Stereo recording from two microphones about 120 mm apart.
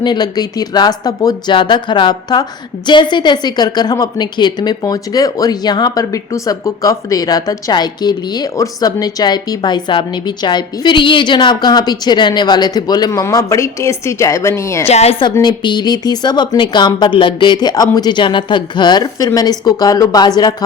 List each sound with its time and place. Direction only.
0.0 s speech: 35° left (ahead or behind)
14.8 s a woman's voice: 60° left (ahead or behind)
15.2 s speech: 40° left (ahead or behind)